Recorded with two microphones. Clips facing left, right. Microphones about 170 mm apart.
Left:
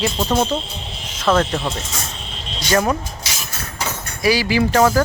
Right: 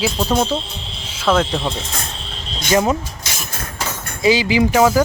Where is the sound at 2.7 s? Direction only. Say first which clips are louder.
Right 2 dB; 20° right (ahead or behind).